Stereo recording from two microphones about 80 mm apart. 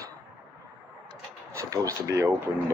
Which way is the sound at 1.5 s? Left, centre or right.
Right.